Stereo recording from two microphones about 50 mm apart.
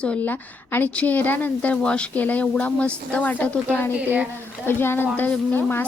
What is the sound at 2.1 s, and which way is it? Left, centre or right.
Speech, left.